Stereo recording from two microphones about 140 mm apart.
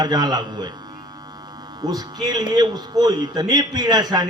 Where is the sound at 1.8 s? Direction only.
30° right (ahead or behind).